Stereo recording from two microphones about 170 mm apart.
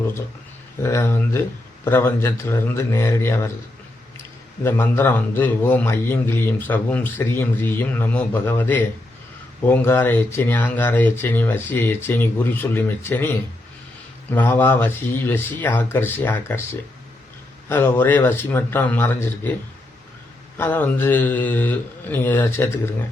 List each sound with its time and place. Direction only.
0.8 s a man's voice: 15° left (ahead or behind)
4.6 s a man's voice: 15° left (ahead or behind)
14.3 s a man's voice: 10° left (ahead or behind)
17.7 s a man's voice: 10° left (ahead or behind)
20.6 s a man's voice: 10° left (ahead or behind)